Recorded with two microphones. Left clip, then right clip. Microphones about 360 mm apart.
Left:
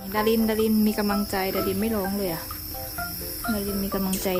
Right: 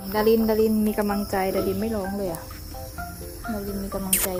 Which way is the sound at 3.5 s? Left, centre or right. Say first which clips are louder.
Left 2 dB; centre.